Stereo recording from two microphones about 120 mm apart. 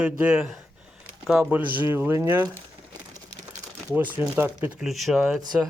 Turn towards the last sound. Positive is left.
turn(degrees=0)  # may be behind; listen again after turning